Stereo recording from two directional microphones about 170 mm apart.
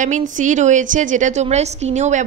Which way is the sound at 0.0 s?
45° right (ahead or behind).